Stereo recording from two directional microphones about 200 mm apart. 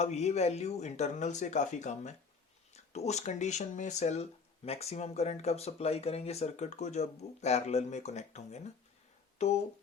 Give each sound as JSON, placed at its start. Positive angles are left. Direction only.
{"t": 0.0, "sound": "speech", "side_deg": 35}